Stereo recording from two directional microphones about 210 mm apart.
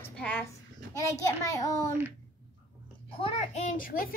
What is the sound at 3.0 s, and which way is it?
A child's voice, 25° left (ahead or behind).